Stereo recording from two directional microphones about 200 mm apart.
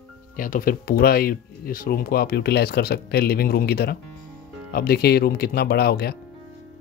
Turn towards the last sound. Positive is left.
turn(degrees=50)  # may be behind; listen again after turning